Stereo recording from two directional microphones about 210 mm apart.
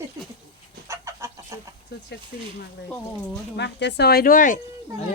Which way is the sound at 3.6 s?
55° left (ahead or behind).